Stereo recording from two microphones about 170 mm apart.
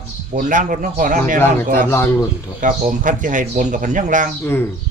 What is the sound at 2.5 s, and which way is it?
Speech, 50° right (ahead or behind).